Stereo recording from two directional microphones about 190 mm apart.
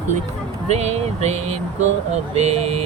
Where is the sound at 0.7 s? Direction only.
35° right (ahead or behind).